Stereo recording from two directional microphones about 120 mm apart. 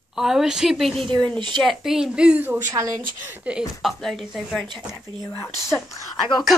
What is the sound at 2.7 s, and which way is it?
Speech, 30° right (ahead or behind).